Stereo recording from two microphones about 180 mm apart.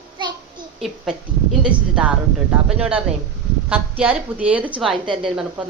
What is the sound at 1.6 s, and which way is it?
A woman's voice, 5° right (ahead or behind).